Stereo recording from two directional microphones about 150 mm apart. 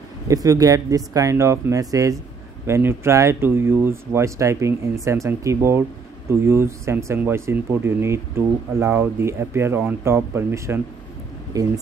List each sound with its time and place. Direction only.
0.3 s speech: 25° right (ahead or behind)